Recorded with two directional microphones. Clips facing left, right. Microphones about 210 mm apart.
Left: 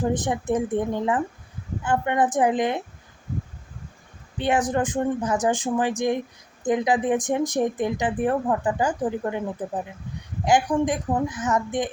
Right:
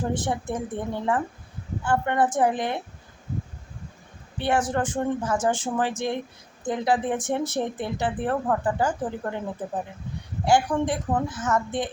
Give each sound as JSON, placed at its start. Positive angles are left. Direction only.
{"t": 0.1, "sound": "speech", "side_deg": 15}
{"t": 4.4, "sound": "speech", "side_deg": 15}
{"t": 10.4, "sound": "speech", "side_deg": 15}